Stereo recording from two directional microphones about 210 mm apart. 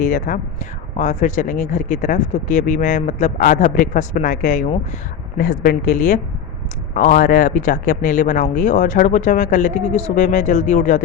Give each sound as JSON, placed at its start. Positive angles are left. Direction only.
{"t": 0.0, "sound": "a woman's voice", "side_deg": 40}